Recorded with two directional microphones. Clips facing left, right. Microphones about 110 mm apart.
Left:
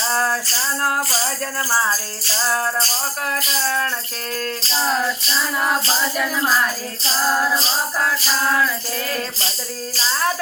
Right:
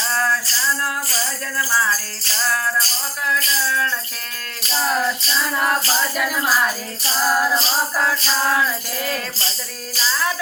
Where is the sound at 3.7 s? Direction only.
50° left (ahead or behind).